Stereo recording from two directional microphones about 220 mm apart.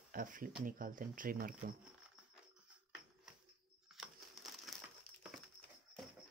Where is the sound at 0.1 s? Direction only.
40° right (ahead or behind).